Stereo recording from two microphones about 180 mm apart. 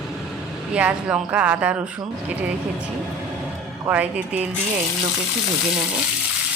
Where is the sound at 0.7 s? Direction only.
5° right (ahead or behind).